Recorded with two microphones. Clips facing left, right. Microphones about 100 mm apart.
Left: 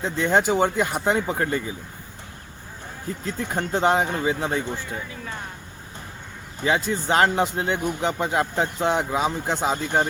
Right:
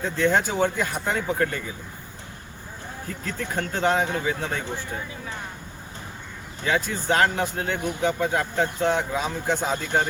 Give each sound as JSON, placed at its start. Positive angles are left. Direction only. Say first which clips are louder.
{"t": 0.0, "sound": "speech", "louder": "left 1 dB", "side_deg": 20}
{"t": 3.1, "sound": "speech", "louder": "left 3 dB", "side_deg": 20}
{"t": 6.7, "sound": "speech", "louder": "left 2 dB", "side_deg": 20}